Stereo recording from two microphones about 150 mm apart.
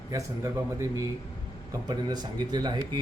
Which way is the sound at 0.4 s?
20° right (ahead or behind).